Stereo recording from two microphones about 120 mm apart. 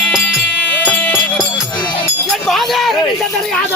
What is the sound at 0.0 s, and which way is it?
Music, 5° left (ahead or behind).